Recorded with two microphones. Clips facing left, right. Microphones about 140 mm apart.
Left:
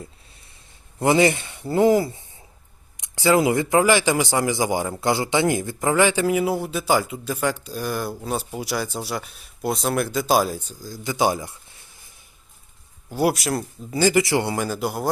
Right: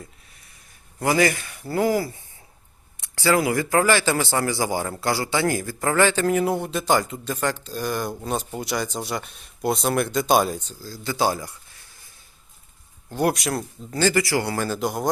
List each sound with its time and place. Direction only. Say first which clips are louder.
0.0 s a sound: left 3 dB; 30° left (ahead or behind)
0.9 s a man's voice: left 3 dB; 25° left (ahead or behind); by 10.6 s centre (ahead or behind)
10.6 s speech: left 2 dB; 15° left (ahead or behind)
13.1 s speech: left 1 dB; 5° left (ahead or behind)
14.0 s speech: left 2 dB; 20° left (ahead or behind)
14.6 s a man's voice: even; 5° left (ahead or behind)